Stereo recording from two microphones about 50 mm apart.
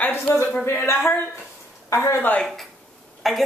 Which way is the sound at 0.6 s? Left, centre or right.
Left.